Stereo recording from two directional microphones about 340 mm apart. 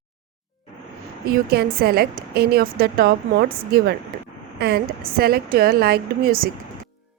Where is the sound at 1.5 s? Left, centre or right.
Right.